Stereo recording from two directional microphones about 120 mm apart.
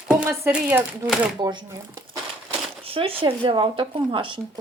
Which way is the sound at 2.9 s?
50° right (ahead or behind).